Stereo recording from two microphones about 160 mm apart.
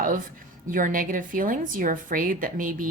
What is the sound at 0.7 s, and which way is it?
A woman's voice, 60° right (ahead or behind).